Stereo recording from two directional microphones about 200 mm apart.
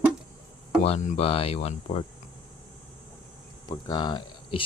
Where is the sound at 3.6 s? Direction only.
20° left (ahead or behind).